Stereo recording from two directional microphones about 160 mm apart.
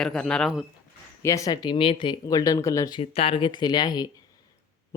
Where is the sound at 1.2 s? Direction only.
20° left (ahead or behind).